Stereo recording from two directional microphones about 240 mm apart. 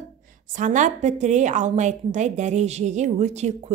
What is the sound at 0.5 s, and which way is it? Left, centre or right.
A woman's voice, right.